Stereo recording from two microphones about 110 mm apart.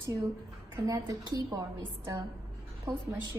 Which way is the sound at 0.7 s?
30° right (ahead or behind).